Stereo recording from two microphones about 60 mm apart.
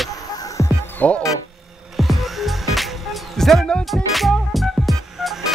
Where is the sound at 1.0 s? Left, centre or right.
Left.